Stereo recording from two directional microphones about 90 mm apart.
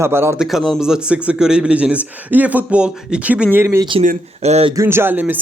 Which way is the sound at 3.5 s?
30° right (ahead or behind).